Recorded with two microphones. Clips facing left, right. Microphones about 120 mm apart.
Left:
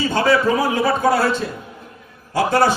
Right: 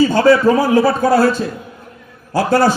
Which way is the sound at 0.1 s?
35° right (ahead or behind).